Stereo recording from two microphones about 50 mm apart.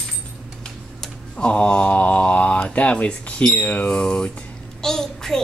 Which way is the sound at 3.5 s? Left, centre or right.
Left.